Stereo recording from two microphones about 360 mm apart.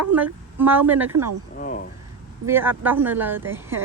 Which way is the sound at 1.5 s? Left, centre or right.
Left.